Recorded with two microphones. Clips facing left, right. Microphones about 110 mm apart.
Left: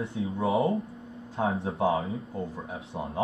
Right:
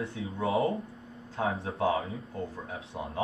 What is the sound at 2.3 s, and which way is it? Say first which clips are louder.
Speech: left 2 dB; 15° left (ahead or behind).